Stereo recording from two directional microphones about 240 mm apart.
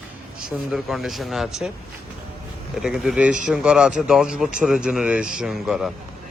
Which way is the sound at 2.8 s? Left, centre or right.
Centre.